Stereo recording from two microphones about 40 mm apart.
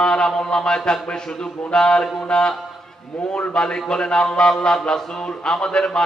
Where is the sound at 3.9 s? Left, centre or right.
Centre.